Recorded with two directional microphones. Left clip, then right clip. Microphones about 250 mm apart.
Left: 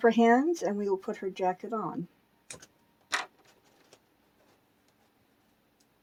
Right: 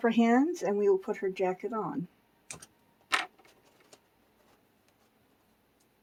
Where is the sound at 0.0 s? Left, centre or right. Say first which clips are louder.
Left 3 dB; left.